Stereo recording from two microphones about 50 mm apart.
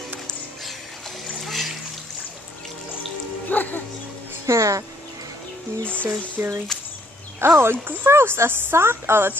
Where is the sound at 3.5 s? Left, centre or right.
Left.